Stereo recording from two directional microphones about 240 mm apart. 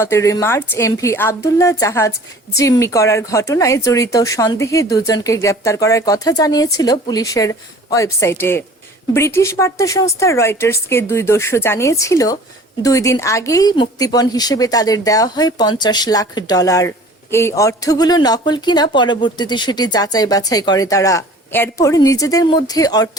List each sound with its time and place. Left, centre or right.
0.0 s speech: centre